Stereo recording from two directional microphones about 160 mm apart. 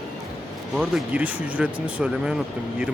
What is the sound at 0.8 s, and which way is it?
Speech, 5° right (ahead or behind).